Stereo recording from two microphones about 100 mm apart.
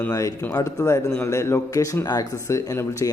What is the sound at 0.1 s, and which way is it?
Speech, 35° left (ahead or behind).